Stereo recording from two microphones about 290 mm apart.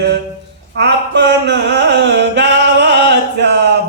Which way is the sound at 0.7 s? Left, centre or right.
Right.